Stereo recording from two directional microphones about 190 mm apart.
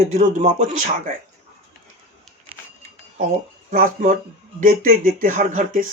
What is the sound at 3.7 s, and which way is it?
Speech, 45° right (ahead or behind).